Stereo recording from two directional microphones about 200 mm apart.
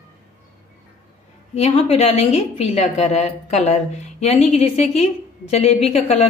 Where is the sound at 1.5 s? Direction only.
30° left (ahead or behind).